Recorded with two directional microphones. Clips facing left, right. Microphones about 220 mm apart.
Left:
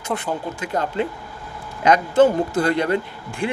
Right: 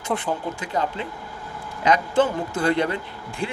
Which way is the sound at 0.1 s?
Centre (ahead or behind).